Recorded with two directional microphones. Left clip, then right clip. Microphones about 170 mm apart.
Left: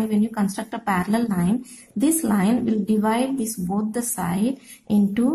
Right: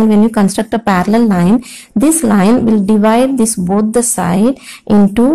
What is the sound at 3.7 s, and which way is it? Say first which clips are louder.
A woman's voice: right 14 dB; 30° right (ahead or behind).